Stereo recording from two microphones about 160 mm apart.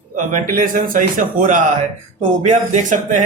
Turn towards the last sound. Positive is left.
turn(degrees=-50)  # may be behind; listen again after turning